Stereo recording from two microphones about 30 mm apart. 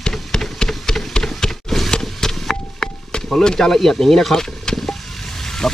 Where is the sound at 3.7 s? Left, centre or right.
Centre.